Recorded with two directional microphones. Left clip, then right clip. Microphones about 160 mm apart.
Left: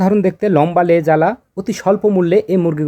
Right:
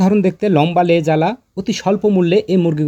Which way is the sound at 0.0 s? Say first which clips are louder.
Left 1 dB; 50° right (ahead or behind).